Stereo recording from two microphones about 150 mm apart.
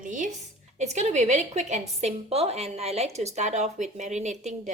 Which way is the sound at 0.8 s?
50° right (ahead or behind).